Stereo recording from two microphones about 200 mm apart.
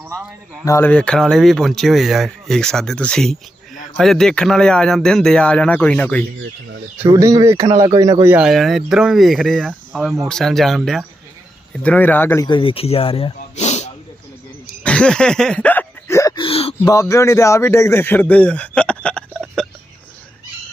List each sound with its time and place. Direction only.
0.0 s a man's voice: 10° right (ahead or behind)
0.6 s speech: 15° left (ahead or behind)
7.0 s speech: 15° right (ahead or behind); by 13.9 s 35° left (ahead or behind)
14.8 s a sound: 5° left (ahead or behind); by 16.7 s 30° left (ahead or behind)
16.8 s a man's voice: 15° left (ahead or behind)